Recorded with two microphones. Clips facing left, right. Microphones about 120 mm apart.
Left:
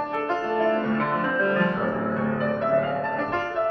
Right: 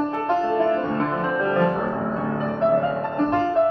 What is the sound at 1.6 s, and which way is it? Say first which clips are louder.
Music: right 3 dB; 30° right (ahead or behind).